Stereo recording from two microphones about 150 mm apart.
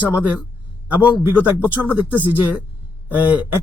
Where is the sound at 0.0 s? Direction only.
10° right (ahead or behind).